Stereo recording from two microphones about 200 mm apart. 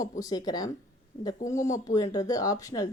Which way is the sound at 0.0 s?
20° left (ahead or behind).